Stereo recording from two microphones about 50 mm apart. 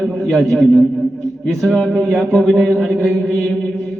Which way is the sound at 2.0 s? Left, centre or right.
Centre.